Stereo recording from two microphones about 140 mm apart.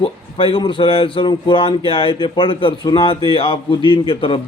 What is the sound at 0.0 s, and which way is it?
A man's voice, 40° left (ahead or behind).